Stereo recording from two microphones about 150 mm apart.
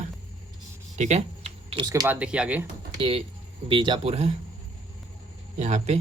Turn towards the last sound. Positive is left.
turn(degrees=-50)  # may be behind; listen again after turning